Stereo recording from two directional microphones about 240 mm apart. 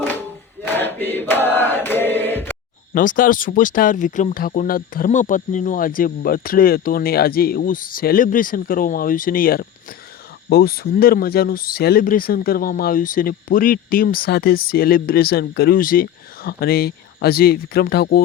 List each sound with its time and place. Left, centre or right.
0.6 s chant: centre
2.9 s speech: left